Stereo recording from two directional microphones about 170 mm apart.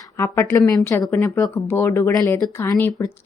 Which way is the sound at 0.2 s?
15° left (ahead or behind).